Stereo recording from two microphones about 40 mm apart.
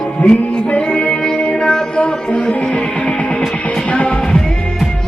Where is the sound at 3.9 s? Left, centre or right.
Left.